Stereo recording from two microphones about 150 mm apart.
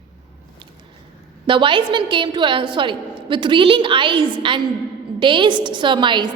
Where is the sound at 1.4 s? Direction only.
35° right (ahead or behind).